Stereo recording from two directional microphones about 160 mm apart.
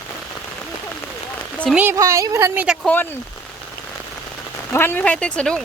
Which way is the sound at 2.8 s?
10° left (ahead or behind).